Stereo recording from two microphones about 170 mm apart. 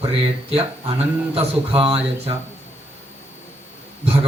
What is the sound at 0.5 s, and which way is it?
Speech, 35° right (ahead or behind).